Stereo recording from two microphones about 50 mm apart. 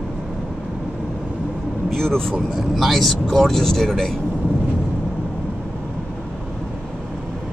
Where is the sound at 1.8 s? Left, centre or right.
Centre.